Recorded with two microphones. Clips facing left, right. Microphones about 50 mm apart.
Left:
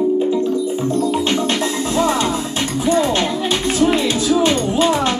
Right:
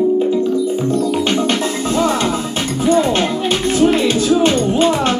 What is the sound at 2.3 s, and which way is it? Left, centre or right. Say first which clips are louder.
Music: right 1 dB; right.